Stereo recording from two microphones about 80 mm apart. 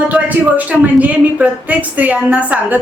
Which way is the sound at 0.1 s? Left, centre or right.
Centre.